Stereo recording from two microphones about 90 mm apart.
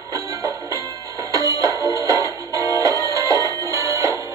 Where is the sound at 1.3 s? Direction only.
35° right (ahead or behind).